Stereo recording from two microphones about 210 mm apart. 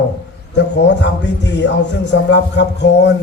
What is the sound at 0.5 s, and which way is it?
A man's voice, 55° left (ahead or behind).